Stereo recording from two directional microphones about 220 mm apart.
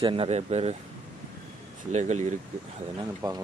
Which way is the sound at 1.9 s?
30° right (ahead or behind).